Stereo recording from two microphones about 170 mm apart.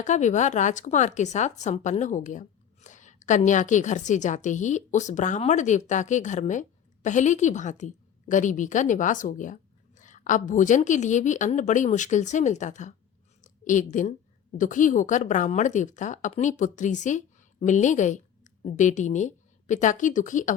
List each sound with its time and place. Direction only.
0.0 s a woman's voice: 45° left (ahead or behind)
13.4 s a sound: 50° left (ahead or behind)
14.6 s a woman's voice: 50° left (ahead or behind)